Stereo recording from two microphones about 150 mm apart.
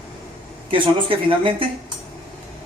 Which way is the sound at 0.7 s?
35° right (ahead or behind).